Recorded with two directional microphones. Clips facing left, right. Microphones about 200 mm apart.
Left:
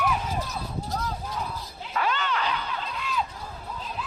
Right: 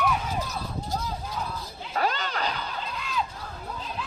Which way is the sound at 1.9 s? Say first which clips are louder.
Even; 40° right (ahead or behind).